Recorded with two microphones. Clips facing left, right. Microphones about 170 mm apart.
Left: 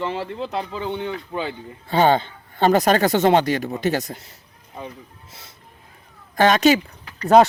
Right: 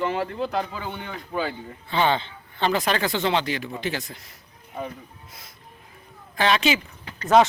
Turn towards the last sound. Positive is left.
turn(degrees=35)  # may be behind; listen again after turning